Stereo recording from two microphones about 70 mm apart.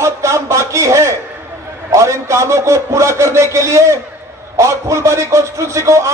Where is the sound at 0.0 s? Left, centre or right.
Right.